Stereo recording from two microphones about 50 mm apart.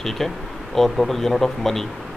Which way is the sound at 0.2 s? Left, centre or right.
Centre.